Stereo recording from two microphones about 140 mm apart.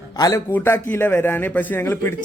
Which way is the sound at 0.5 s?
15° left (ahead or behind).